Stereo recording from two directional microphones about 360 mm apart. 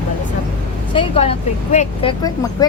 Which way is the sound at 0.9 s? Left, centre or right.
Centre.